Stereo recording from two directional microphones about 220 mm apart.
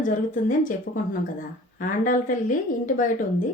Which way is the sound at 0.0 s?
35° left (ahead or behind).